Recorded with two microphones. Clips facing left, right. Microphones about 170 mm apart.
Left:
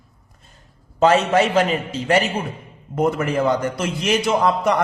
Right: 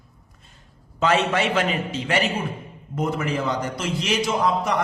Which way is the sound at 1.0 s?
40° left (ahead or behind).